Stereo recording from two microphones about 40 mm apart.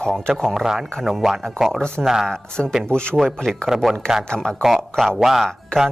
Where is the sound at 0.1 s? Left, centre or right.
Centre.